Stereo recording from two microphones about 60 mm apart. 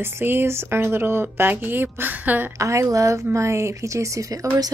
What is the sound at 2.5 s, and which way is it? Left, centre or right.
A woman's voice, right.